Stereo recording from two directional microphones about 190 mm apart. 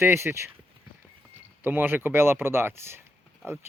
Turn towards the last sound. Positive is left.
turn(degrees=-10)  # may be behind; listen again after turning